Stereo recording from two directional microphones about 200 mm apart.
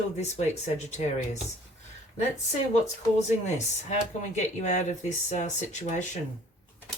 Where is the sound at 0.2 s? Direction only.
35° left (ahead or behind).